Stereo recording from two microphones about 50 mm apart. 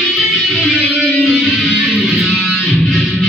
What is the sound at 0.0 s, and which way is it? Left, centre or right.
Music, centre.